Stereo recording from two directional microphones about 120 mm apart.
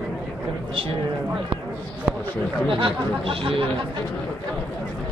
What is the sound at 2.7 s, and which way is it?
Speech, 45° right (ahead or behind).